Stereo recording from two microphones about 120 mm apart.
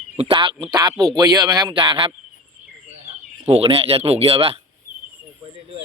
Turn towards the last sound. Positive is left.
turn(degrees=-55)  # may be behind; listen again after turning